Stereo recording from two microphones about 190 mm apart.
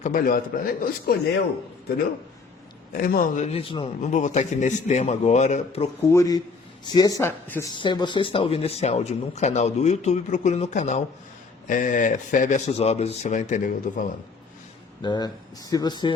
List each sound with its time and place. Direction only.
0.0 s a man's voice: 45° left (ahead or behind)
2.9 s speech: 50° left (ahead or behind); by 4.1 s 30° left (ahead or behind)
4.1 s speech: 40° left (ahead or behind)
6.1 s speech: 15° left (ahead or behind)
7.7 s speech: 25° left (ahead or behind); by 14.1 s 45° left (ahead or behind)
15.0 s speech: 25° left (ahead or behind)